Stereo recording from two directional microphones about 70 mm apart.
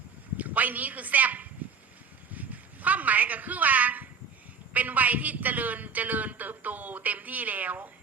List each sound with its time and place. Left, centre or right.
0.3 s a woman's voice: right
2.3 s a sound: right
4.7 s a man's voice: right